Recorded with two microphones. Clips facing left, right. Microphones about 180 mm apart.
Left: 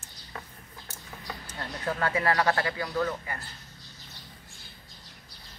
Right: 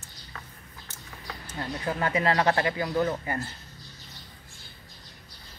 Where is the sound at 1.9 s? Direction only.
20° right (ahead or behind).